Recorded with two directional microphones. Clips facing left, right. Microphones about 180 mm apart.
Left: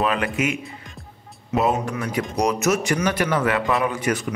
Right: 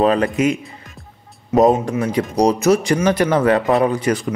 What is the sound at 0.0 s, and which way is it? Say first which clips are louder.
Speech: right 7 dB; 35° right (ahead or behind).